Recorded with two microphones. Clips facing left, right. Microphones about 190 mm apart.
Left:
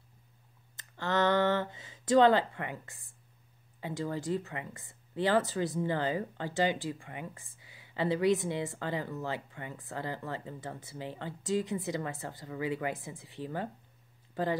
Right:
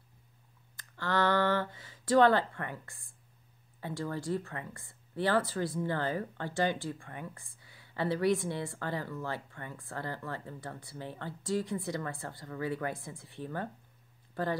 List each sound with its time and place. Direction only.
0.7 s speech: 20° left (ahead or behind)